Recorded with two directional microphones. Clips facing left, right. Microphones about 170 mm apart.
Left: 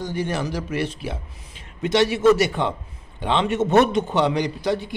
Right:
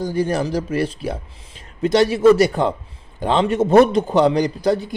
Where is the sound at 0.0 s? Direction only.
35° right (ahead or behind).